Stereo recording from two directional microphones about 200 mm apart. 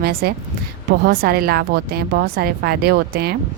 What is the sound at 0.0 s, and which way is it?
Speech, 50° right (ahead or behind).